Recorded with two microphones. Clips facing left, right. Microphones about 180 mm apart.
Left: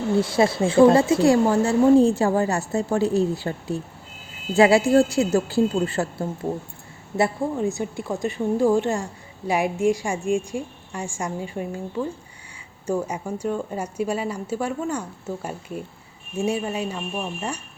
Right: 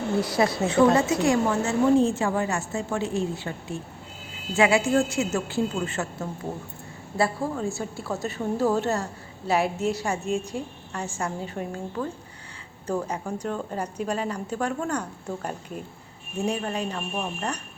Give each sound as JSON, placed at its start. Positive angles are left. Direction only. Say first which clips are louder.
{"t": 0.2, "sound": "a woman's voice", "louder": "left 3 dB", "side_deg": 25}
{"t": 7.2, "sound": "speech", "louder": "left 3 dB", "side_deg": 15}